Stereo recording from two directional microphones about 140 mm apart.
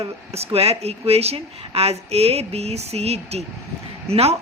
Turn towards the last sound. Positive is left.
turn(degrees=-45)  # may be behind; listen again after turning